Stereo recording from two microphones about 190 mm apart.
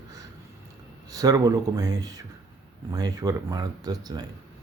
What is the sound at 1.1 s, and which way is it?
Speech, 20° right (ahead or behind).